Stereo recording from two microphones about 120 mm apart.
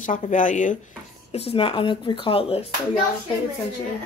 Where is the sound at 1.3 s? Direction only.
55° left (ahead or behind).